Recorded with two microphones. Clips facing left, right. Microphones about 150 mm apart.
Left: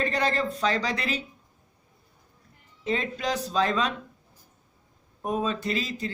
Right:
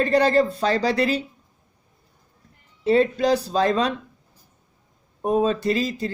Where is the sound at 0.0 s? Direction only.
35° right (ahead or behind).